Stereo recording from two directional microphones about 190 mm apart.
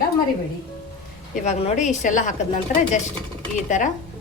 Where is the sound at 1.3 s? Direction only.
35° left (ahead or behind).